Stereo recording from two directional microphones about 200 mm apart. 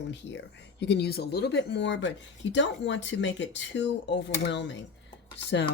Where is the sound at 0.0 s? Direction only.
60° left (ahead or behind).